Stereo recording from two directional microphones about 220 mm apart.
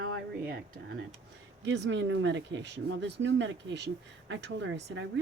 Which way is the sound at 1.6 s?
55° right (ahead or behind).